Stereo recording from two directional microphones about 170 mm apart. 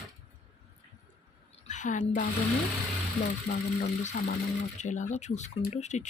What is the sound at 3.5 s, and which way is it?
Speech, 40° left (ahead or behind).